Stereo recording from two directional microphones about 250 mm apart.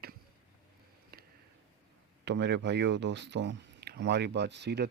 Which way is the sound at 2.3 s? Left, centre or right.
Right.